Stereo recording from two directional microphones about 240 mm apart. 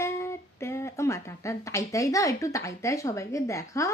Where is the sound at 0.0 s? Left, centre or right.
Centre.